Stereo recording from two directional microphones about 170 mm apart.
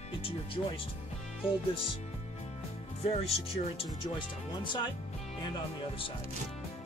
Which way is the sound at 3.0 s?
35° left (ahead or behind).